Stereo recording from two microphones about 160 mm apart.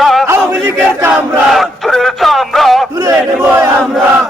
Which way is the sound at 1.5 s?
Centre (ahead or behind).